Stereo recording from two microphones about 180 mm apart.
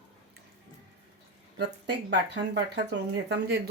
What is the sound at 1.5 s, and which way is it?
Speech, 75° right (ahead or behind).